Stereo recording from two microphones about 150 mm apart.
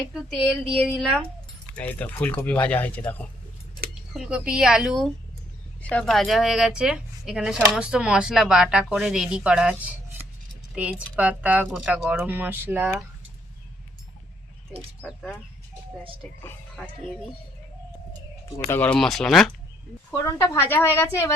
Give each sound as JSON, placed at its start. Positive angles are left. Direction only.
{"t": 0.1, "sound": "speech", "side_deg": -5}
{"t": 1.7, "sound": "speech", "side_deg": 10}
{"t": 4.1, "sound": "speech", "side_deg": -5}
{"t": 5.8, "sound": "speech", "side_deg": 5}
{"t": 18.7, "sound": "speech", "side_deg": 10}
{"t": 20.1, "sound": "speech", "side_deg": 15}